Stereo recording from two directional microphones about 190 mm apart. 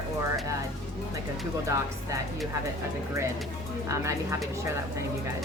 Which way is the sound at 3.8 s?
15° right (ahead or behind).